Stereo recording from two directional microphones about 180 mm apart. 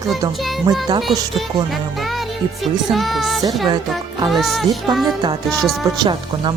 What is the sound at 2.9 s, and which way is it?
Music, centre (ahead or behind).